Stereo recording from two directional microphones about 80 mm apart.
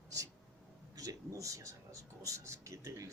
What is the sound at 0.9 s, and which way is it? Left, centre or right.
Speech, right.